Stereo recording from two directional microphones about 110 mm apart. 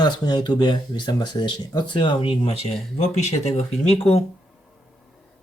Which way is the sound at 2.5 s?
70° left (ahead or behind).